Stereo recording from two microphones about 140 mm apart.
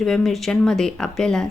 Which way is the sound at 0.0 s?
Centre (ahead or behind).